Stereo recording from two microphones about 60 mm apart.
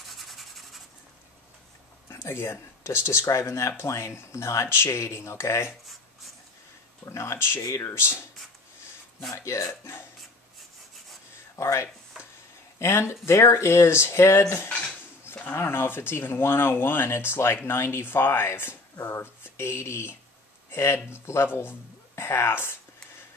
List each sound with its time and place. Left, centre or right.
0.0 s rub: centre
2.0 s speech: left
7.1 s speech: left
9.3 s speech: left
11.5 s speech: left
15.5 s speech: left